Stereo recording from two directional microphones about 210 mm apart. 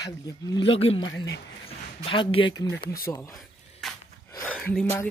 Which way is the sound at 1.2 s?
55° left (ahead or behind).